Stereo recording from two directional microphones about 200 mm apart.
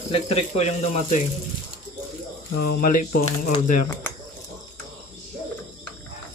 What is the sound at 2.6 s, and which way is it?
Speech, 50° left (ahead or behind).